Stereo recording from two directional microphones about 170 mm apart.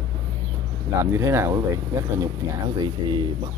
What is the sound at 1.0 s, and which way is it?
Speech, 15° right (ahead or behind).